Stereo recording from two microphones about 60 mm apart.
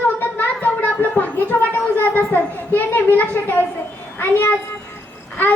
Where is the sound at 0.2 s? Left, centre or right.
Left.